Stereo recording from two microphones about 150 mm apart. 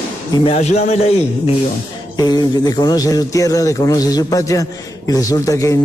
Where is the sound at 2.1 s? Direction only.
25° left (ahead or behind).